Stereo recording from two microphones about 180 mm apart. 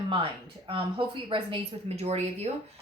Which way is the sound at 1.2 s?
30° right (ahead or behind).